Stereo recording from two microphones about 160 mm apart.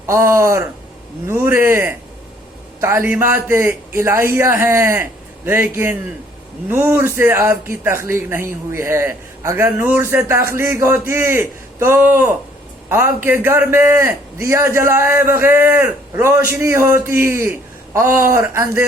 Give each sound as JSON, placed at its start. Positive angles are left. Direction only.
{"t": 0.0, "sound": "a man's voice", "side_deg": -15}